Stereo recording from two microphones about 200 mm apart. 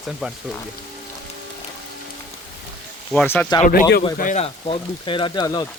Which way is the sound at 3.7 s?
50° left (ahead or behind).